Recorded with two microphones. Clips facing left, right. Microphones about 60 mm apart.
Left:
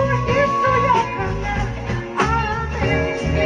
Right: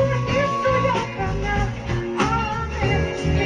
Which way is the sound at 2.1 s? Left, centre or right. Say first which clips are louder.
Left 3 dB; left.